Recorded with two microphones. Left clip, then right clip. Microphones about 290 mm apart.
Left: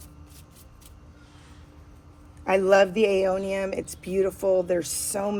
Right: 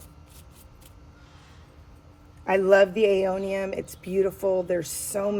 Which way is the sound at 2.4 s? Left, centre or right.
Left.